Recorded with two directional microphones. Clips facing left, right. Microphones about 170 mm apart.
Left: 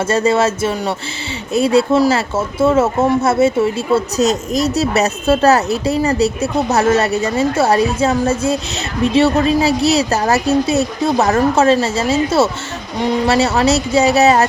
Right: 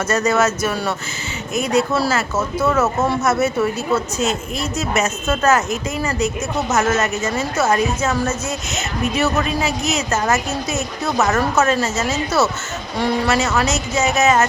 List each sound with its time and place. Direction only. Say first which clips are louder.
0.0 s speech: left 3 dB; 30° left (ahead or behind)
9.1 s speech: left 8 dB; 30° left (ahead or behind)